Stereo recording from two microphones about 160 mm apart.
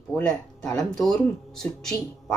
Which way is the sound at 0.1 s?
5° left (ahead or behind).